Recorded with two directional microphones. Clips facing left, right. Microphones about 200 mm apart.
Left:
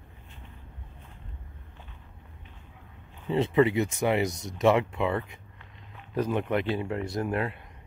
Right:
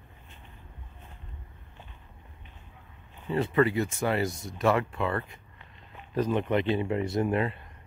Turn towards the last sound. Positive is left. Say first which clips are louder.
# right 2 dB
turn(degrees=0)  # may be behind; listen again after turning